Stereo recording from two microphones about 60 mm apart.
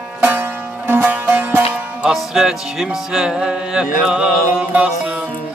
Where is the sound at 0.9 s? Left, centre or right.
Right.